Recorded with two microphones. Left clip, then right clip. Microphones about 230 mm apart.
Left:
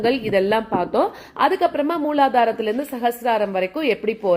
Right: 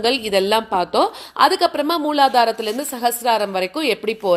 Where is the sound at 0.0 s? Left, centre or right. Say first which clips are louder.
Right 1 dB; right.